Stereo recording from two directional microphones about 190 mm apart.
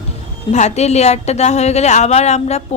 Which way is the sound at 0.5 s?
35° left (ahead or behind).